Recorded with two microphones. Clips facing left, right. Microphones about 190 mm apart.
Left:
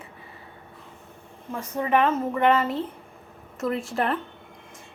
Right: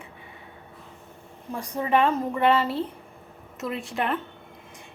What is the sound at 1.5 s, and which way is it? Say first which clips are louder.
Speech: left 1 dB; 15° right (ahead or behind).